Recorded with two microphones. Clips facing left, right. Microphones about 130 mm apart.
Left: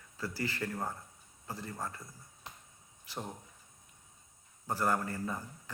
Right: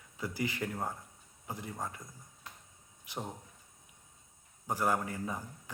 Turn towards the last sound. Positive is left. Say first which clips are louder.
# even
turn(degrees=-15)  # may be behind; listen again after turning